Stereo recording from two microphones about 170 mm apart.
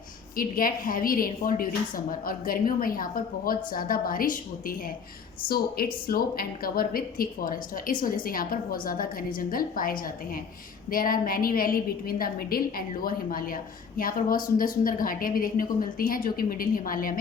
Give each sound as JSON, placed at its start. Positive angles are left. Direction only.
{"t": 0.3, "sound": "a woman's voice", "side_deg": 55}